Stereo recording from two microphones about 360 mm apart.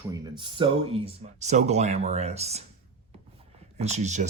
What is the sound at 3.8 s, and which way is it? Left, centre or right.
Speech, centre.